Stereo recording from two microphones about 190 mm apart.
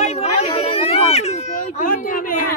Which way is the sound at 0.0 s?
35° left (ahead or behind).